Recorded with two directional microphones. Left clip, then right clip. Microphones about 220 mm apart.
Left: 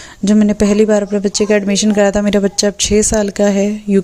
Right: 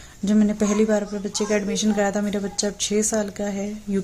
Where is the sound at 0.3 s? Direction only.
35° left (ahead or behind).